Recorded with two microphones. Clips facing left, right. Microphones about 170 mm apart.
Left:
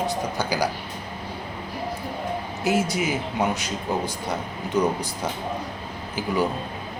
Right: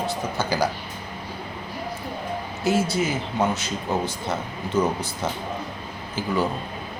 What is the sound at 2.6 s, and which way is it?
Speech, 15° left (ahead or behind).